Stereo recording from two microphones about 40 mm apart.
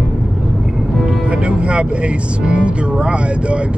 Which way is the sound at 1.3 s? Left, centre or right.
Right.